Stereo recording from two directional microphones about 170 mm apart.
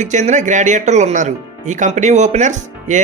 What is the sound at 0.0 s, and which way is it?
Speech, 45° right (ahead or behind).